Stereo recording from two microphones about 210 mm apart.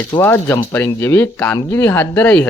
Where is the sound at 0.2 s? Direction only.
10° left (ahead or behind).